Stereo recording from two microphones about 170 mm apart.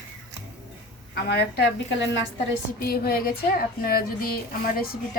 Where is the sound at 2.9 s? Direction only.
60° left (ahead or behind).